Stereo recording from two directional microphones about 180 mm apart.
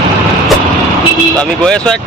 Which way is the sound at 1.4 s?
5° left (ahead or behind).